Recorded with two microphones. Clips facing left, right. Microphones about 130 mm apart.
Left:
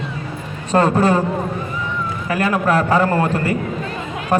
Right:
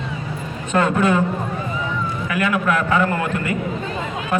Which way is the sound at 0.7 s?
35° left (ahead or behind).